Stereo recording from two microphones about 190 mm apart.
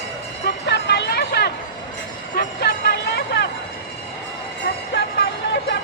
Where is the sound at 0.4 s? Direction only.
60° left (ahead or behind).